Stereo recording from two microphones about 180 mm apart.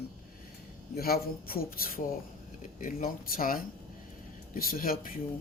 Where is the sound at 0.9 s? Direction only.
55° left (ahead or behind).